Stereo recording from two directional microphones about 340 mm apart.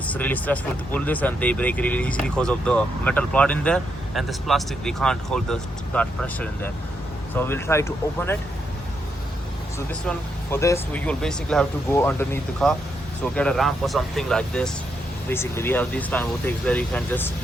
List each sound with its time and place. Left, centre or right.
0.1 s speech: centre
9.7 s speech: centre